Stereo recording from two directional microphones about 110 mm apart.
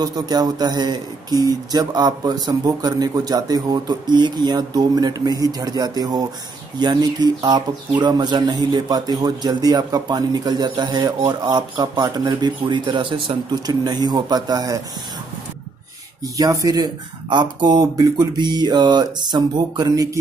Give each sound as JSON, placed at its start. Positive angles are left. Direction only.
{"t": 0.0, "sound": "speech", "side_deg": -40}
{"t": 16.3, "sound": "speech", "side_deg": -35}